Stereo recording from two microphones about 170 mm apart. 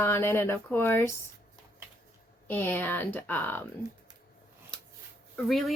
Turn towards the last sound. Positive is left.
turn(degrees=0)  # may be behind; listen again after turning